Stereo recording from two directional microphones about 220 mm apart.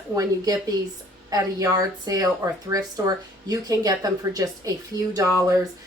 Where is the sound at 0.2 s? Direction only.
15° right (ahead or behind).